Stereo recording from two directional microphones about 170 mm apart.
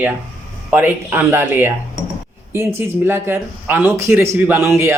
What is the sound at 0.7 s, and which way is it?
A man's voice, 10° right (ahead or behind).